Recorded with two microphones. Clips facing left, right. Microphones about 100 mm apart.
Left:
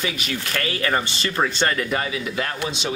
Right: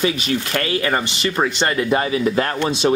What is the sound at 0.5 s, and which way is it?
Speech, 20° right (ahead or behind).